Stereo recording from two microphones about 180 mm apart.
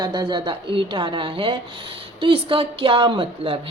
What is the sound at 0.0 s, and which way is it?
A woman's voice, 25° right (ahead or behind).